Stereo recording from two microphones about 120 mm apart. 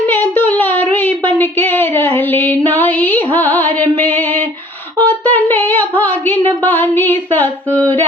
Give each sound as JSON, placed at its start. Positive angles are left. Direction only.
{"t": 0.1, "sound": "a sound", "side_deg": 15}
{"t": 3.3, "sound": "music", "side_deg": 15}
{"t": 4.9, "sound": "speech", "side_deg": 15}